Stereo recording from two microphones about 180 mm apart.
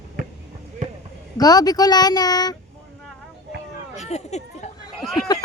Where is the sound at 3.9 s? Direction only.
40° left (ahead or behind).